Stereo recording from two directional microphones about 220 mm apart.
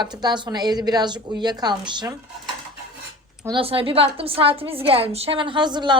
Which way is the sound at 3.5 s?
25° right (ahead or behind).